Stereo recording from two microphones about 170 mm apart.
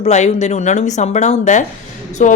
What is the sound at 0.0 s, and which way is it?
A woman's voice, 40° left (ahead or behind).